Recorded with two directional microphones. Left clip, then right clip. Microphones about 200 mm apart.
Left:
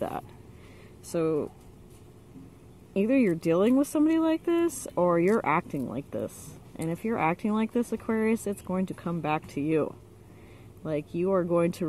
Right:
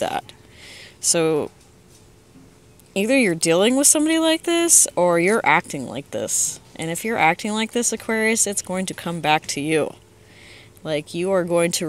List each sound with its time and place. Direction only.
0.7 s speech: 20° right (ahead or behind)
2.9 s speech: 15° right (ahead or behind)